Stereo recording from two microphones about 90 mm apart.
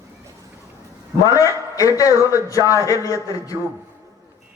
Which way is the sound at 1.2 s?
35° left (ahead or behind).